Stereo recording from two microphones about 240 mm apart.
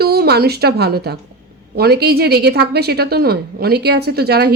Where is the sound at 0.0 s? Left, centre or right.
Right.